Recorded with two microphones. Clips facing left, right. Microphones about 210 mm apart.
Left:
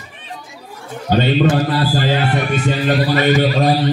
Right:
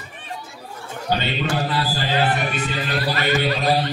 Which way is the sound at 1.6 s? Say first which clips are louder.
Left 7 dB; 45° left (ahead or behind).